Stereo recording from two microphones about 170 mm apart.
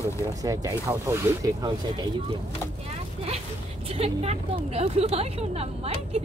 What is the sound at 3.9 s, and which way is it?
Speech, 35° right (ahead or behind).